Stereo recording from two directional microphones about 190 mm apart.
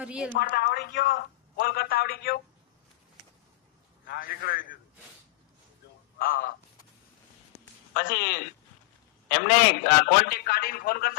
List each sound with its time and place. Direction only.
0.0 s a woman's voice: 5° right (ahead or behind)
0.3 s a man's voice: 50° left (ahead or behind)
4.1 s a man's voice: 50° left (ahead or behind)
6.1 s a man's voice: 50° left (ahead or behind)
7.9 s a man's voice: 45° left (ahead or behind)